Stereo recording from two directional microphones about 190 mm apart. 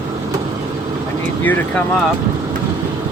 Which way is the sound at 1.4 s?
10° left (ahead or behind).